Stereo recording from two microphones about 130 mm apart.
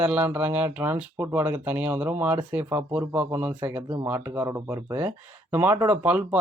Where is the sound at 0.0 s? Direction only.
10° right (ahead or behind).